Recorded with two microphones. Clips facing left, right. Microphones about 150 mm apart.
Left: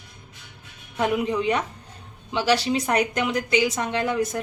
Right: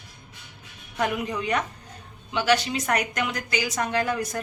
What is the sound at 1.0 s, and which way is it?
A woman's voice, 25° left (ahead or behind).